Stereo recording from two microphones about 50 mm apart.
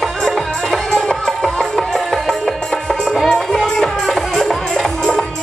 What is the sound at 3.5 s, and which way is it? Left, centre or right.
Music, centre.